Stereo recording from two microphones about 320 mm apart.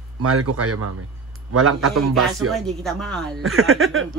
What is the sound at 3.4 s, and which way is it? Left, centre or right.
Speech, right.